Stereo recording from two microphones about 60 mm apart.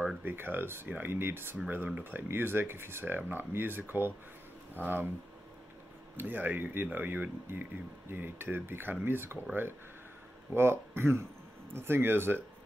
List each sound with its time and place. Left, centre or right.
0.2 s speech: right
6.1 s speech: right